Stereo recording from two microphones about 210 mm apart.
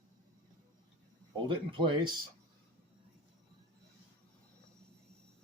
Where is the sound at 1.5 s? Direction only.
25° right (ahead or behind).